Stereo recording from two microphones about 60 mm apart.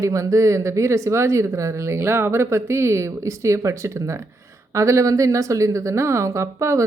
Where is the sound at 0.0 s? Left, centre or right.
Right.